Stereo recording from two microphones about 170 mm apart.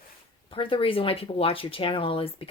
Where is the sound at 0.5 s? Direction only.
30° left (ahead or behind).